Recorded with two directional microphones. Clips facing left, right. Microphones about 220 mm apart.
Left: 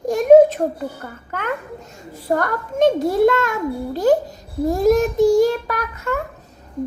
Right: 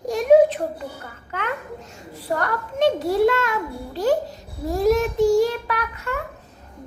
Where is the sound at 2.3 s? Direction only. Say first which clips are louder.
Left 4 dB; 45° left (ahead or behind).